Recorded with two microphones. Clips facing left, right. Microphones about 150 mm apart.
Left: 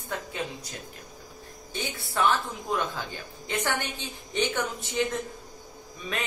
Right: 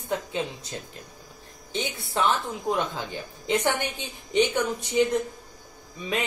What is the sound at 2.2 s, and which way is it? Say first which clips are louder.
Speech: even; 20° right (ahead or behind).